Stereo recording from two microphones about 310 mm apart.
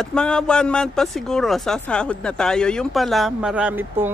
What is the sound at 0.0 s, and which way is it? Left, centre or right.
Speech, centre.